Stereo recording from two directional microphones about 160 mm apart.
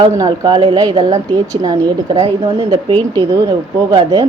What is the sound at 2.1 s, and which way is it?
Speech, 40° right (ahead or behind).